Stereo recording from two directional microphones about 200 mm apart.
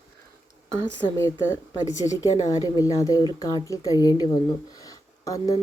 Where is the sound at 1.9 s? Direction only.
15° left (ahead or behind).